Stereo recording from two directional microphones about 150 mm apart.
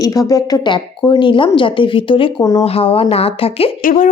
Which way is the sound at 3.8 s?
65° left (ahead or behind).